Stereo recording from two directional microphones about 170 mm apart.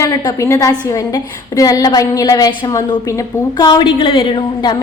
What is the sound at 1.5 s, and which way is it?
A woman's voice, 20° left (ahead or behind).